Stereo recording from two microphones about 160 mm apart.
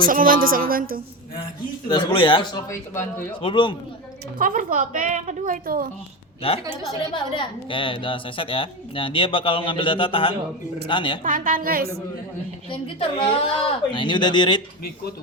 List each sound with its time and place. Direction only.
0.0 s a woman's voice: 60° right (ahead or behind)
1.9 s a woman's voice: 30° left (ahead or behind)
2.6 s speech: 15° left (ahead or behind)
3.4 s a woman's voice: 30° left (ahead or behind)
4.4 s a woman's voice: 55° right (ahead or behind)
6.4 s a woman's voice: 35° left (ahead or behind)
11.2 s a woman's voice: 55° right (ahead or behind)
12.7 s a woman's voice: 35° left (ahead or behind)